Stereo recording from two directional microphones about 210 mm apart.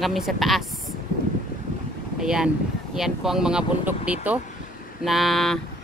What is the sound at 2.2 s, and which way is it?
Speech, 5° right (ahead or behind).